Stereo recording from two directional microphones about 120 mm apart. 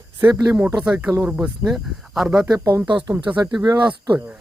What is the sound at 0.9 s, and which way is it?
Speech, 10° right (ahead or behind).